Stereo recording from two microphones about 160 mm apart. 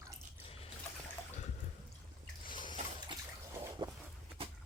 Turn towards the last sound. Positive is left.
turn(degrees=-15)  # may be behind; listen again after turning